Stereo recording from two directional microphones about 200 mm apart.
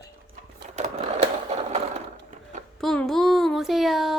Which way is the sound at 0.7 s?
35° right (ahead or behind).